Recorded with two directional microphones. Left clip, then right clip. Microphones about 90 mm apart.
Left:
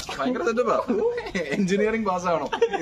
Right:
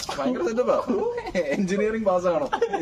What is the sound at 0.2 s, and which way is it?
A man's voice, 25° left (ahead or behind).